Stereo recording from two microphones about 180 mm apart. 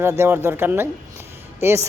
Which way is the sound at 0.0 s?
15° right (ahead or behind).